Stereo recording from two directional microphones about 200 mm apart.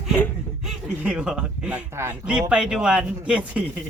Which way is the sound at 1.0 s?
5° right (ahead or behind).